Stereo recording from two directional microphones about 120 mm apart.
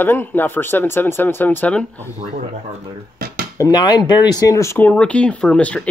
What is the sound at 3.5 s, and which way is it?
Speech, 30° left (ahead or behind).